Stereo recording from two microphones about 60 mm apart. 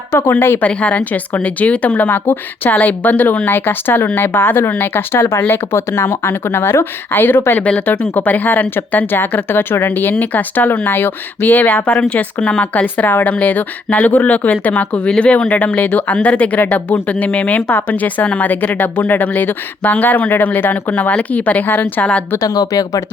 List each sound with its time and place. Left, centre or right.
0.1 s speech: left
0.6 s speech: left
7.6 s speech: left
12.8 s speech: left
22.4 s speech: left